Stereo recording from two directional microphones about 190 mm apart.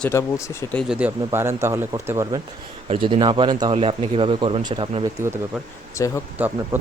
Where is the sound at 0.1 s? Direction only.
15° left (ahead or behind).